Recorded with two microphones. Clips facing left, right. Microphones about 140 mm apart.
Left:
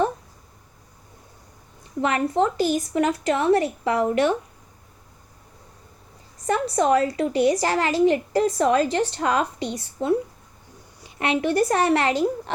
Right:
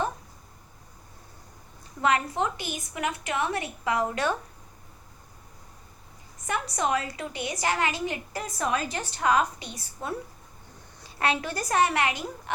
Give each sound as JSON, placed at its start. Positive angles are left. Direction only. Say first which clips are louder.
{"t": 2.0, "sound": "a woman's voice", "louder": "left 4 dB", "side_deg": 30}
{"t": 6.4, "sound": "a woman's voice", "louder": "left 7 dB", "side_deg": 30}